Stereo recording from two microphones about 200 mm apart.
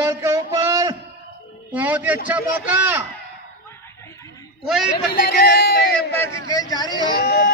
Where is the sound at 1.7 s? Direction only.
10° right (ahead or behind).